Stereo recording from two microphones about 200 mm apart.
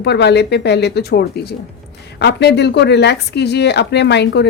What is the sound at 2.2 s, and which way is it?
Speech, 55° left (ahead or behind).